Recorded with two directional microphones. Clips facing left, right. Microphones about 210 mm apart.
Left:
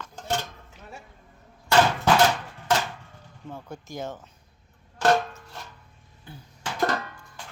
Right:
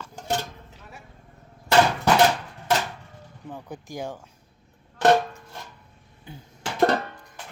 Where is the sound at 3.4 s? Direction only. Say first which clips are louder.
Right 1 dB; 15° right (ahead or behind).